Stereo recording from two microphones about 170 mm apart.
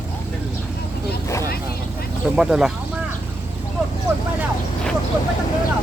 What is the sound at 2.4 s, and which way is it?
Speech, 5° right (ahead or behind).